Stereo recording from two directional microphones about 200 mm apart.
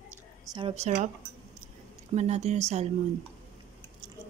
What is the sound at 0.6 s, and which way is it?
Speech, 30° right (ahead or behind).